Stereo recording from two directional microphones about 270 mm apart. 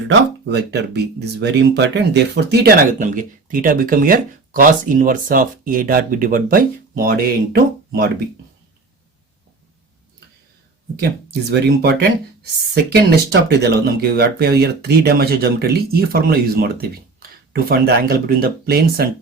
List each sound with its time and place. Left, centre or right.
0.1 s speech: right
11.8 s speech: right